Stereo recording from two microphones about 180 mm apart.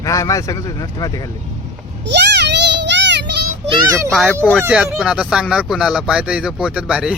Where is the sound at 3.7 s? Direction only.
20° right (ahead or behind).